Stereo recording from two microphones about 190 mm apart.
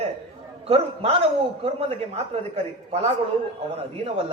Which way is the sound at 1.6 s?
30° right (ahead or behind).